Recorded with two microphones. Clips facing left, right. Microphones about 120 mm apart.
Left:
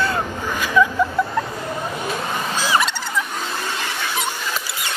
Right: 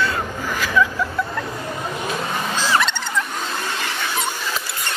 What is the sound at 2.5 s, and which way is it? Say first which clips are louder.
Vehicle: even; 10° left (ahead or behind).